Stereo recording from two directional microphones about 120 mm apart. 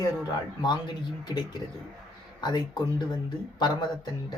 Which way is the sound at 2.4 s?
35° left (ahead or behind).